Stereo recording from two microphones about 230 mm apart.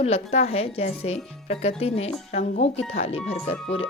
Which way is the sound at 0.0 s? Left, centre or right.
Left.